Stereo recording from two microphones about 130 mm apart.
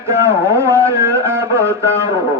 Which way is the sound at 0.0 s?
20° right (ahead or behind).